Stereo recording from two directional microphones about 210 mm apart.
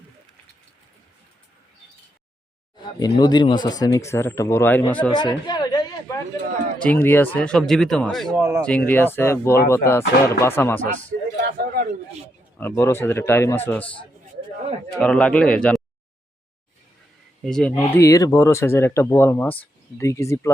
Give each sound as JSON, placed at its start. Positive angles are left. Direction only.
{"t": 2.8, "sound": "speech", "side_deg": 20}
{"t": 5.1, "sound": "speech", "side_deg": 20}
{"t": 8.4, "sound": "speech", "side_deg": -10}
{"t": 8.6, "sound": "speech", "side_deg": 5}
{"t": 11.5, "sound": "a man's voice", "side_deg": -45}
{"t": 12.5, "sound": "speech", "side_deg": 10}
{"t": 17.4, "sound": "speech", "side_deg": 5}